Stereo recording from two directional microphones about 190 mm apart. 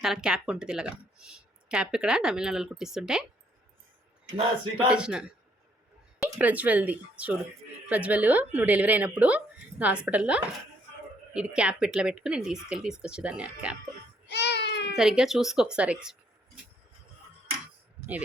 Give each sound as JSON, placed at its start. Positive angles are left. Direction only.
{"t": 0.0, "sound": "speech", "side_deg": -5}
{"t": 4.9, "sound": "speech", "side_deg": -5}
{"t": 14.3, "sound": "a sound", "side_deg": 65}
{"t": 14.9, "sound": "speech", "side_deg": -5}